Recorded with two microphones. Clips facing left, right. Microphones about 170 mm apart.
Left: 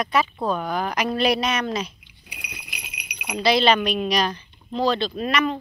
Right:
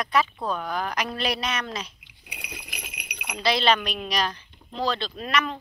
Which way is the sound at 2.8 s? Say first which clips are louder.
Right 1 dB; 55° right (ahead or behind).